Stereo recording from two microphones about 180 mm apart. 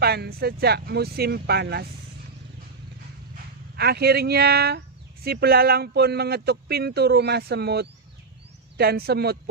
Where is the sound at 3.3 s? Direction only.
60° right (ahead or behind).